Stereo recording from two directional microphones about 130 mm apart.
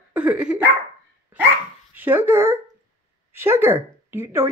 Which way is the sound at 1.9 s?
15° right (ahead or behind).